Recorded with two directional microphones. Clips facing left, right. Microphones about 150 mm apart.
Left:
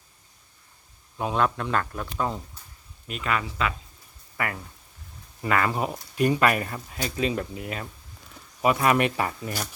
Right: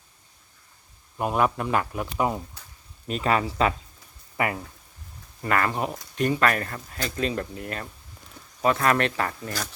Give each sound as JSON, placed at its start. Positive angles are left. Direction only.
{"t": 1.2, "sound": "speech", "side_deg": -10}
{"t": 3.1, "sound": "speech", "side_deg": -35}
{"t": 4.4, "sound": "speech", "side_deg": -20}
{"t": 5.5, "sound": "speech", "side_deg": 5}